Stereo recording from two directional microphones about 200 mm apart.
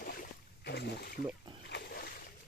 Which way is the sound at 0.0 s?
45° left (ahead or behind).